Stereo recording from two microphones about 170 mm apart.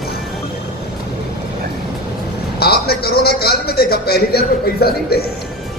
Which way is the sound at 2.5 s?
65° left (ahead or behind).